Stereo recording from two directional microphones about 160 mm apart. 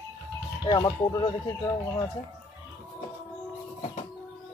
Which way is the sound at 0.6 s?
25° left (ahead or behind).